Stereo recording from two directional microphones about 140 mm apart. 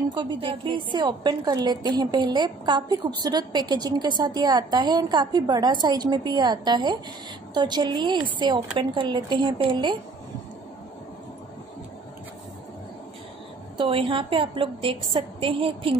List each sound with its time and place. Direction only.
0.1 s a woman's voice: 35° right (ahead or behind)
13.7 s a woman's voice: 35° right (ahead or behind)